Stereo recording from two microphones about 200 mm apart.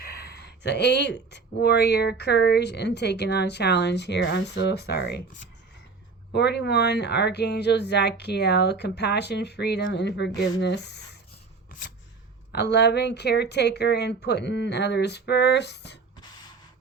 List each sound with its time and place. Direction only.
0.0 s speech: 50° left (ahead or behind)
6.3 s speech: 55° left (ahead or behind)
12.5 s speech: 55° left (ahead or behind)